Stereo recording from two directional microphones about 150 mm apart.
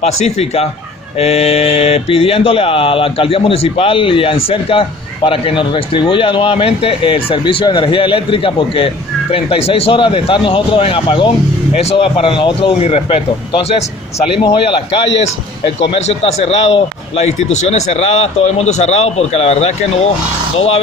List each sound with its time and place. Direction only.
0.0 s speech: 45° left (ahead or behind)